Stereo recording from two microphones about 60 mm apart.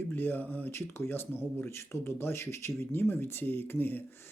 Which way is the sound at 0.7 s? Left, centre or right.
Left.